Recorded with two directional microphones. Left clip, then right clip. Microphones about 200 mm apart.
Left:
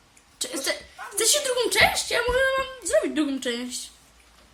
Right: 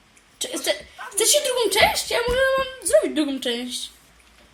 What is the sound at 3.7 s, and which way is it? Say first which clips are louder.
Speech: right 5 dB; 35° left (ahead or behind).